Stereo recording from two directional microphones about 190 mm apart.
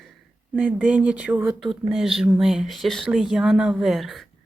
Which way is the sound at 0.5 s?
5° right (ahead or behind).